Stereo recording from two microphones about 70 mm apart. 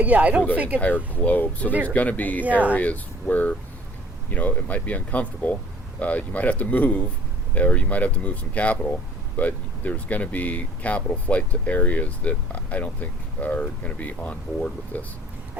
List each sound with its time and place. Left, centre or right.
0.0 s speech: centre
1.1 s speech: left
2.5 s speech: right
2.7 s speech: left